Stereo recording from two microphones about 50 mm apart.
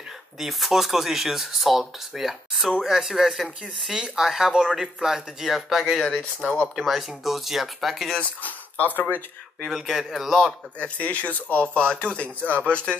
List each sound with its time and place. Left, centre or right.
0.4 s speech: centre
8.2 s speech: left
9.6 s speech: centre
10.8 s speech: left